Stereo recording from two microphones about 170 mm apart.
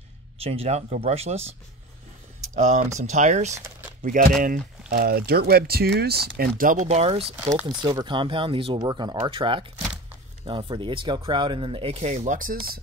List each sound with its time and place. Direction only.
0.4 s speech: 35° right (ahead or behind)
2.5 s speech: 45° right (ahead or behind)
7.6 s speech: 25° right (ahead or behind); by 12.7 s 55° right (ahead or behind)